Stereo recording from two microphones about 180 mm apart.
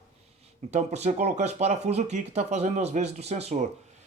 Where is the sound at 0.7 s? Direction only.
40° right (ahead or behind).